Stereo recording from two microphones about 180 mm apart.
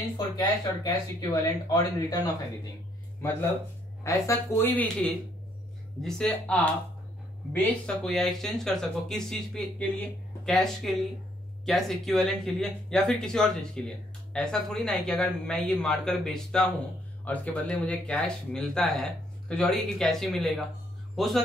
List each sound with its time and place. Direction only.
0.2 s speech: 20° left (ahead or behind)
3.2 s speech: 15° left (ahead or behind)